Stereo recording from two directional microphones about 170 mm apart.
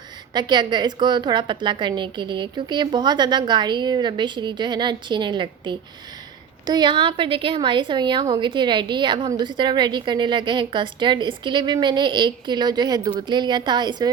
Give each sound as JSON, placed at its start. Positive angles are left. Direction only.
{"t": 0.3, "sound": "a woman's voice", "side_deg": -25}